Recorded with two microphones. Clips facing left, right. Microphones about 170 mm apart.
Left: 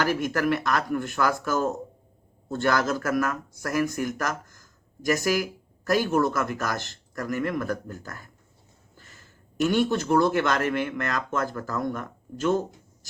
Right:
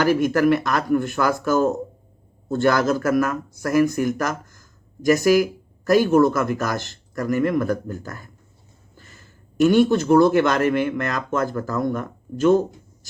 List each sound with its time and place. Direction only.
0.0 s speech: 15° right (ahead or behind)
9.6 s speech: 10° right (ahead or behind)